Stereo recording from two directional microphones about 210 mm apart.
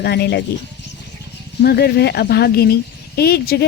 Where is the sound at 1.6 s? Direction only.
50° left (ahead or behind).